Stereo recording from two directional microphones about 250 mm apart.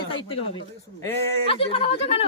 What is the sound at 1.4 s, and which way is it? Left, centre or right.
Speech, left.